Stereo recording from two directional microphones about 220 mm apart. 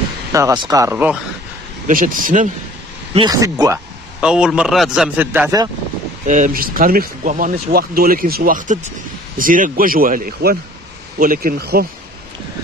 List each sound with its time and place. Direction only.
0.3 s speech: 15° right (ahead or behind)
1.9 s speech: 40° right (ahead or behind)
3.2 s speech: 15° right (ahead or behind)
4.2 s a man's voice: 5° right (ahead or behind)
6.2 s speech: 35° right (ahead or behind)